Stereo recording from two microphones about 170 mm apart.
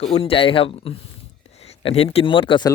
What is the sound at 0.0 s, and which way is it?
Speech, 35° left (ahead or behind).